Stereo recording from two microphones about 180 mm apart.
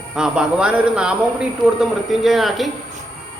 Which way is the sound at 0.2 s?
5° right (ahead or behind).